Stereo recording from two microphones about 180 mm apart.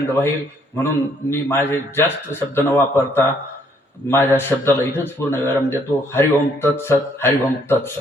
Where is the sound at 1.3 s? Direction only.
15° left (ahead or behind).